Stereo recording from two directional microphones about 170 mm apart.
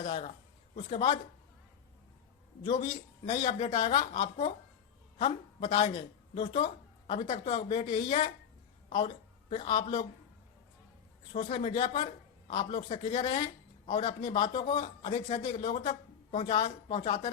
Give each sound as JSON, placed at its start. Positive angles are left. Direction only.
{"t": 0.0, "sound": "a woman's voice", "side_deg": 30}
{"t": 2.6, "sound": "a woman's voice", "side_deg": 25}
{"t": 7.1, "sound": "speech", "side_deg": 40}
{"t": 11.5, "sound": "speech", "side_deg": 30}
{"t": 12.5, "sound": "a man's voice", "side_deg": 45}
{"t": 12.7, "sound": "a woman's voice", "side_deg": 30}
{"t": 13.4, "sound": "a sound", "side_deg": 30}
{"t": 14.2, "sound": "a woman's voice", "side_deg": 25}